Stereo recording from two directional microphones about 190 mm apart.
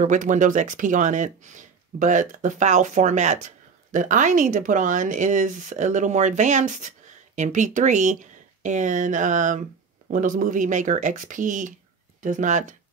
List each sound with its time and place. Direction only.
0.0 s speech: 40° right (ahead or behind)